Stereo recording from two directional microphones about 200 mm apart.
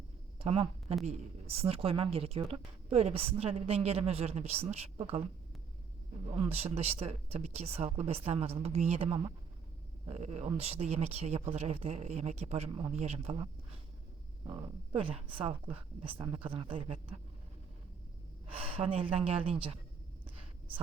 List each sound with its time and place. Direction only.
0.3 s a woman's voice: 25° right (ahead or behind)
6.3 s a woman's voice: 30° right (ahead or behind)
15.0 s a woman's voice: 25° right (ahead or behind)
18.6 s a woman's voice: 30° right (ahead or behind)